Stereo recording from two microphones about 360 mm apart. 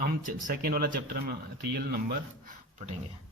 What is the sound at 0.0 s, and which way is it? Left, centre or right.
A man's voice, right.